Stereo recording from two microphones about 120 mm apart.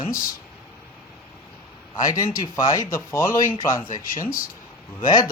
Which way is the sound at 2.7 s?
25° left (ahead or behind).